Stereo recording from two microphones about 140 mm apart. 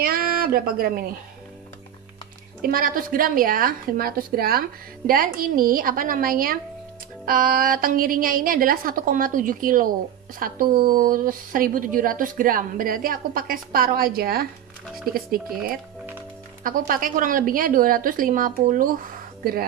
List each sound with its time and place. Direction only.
0.0 s a sound: 90° right
2.6 s a woman's voice: 90° right
10.4 s a woman's voice: 90° right
16.6 s a woman's voice: 80° right